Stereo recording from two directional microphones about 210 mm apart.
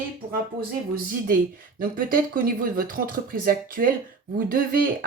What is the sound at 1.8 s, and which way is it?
Speech, 45° right (ahead or behind).